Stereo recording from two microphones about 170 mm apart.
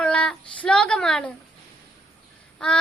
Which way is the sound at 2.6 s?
5° left (ahead or behind).